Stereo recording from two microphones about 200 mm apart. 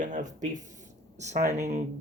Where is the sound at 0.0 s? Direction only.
40° right (ahead or behind).